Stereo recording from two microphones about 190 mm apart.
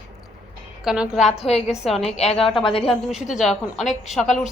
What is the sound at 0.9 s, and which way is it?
Speech, 5° right (ahead or behind).